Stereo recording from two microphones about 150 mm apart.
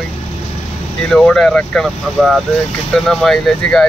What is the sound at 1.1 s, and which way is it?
Speech, 5° left (ahead or behind).